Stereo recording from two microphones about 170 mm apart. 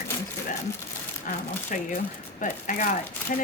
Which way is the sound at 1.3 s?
50° left (ahead or behind).